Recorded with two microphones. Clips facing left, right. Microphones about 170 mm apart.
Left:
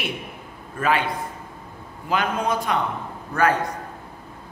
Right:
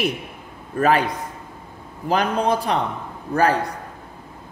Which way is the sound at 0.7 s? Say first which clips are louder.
Right 4 dB; 40° right (ahead or behind).